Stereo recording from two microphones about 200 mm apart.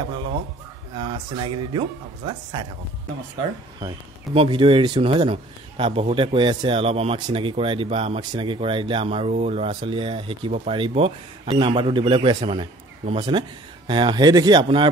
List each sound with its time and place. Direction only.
0.9 s speech: 25° right (ahead or behind)
3.8 s speech: 25° right (ahead or behind)